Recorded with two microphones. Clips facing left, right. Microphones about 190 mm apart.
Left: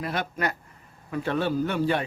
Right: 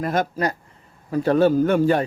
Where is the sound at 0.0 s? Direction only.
45° right (ahead or behind).